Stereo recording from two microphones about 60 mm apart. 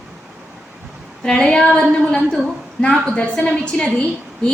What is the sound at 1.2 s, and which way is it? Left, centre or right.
Speech, centre.